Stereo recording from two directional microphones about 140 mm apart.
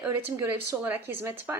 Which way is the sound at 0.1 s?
20° right (ahead or behind).